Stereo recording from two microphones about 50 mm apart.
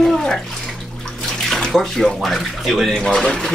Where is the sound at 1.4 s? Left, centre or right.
Centre.